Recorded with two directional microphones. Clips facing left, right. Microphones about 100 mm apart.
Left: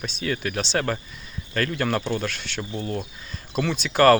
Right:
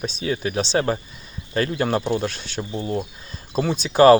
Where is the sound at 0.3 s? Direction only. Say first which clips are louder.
Right 3 dB; 15° right (ahead or behind).